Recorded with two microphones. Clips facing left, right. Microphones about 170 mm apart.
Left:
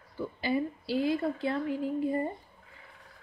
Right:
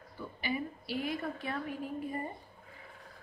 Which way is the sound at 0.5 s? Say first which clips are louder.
Left 6 dB; 30° left (ahead or behind).